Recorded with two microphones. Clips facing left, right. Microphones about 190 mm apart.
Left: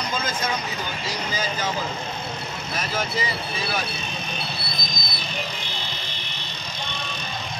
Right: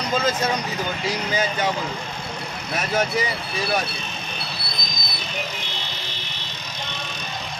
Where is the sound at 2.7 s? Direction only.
70° right (ahead or behind).